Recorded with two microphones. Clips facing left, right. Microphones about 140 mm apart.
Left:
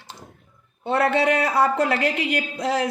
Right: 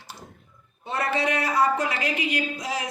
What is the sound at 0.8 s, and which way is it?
A woman's voice, 70° left (ahead or behind).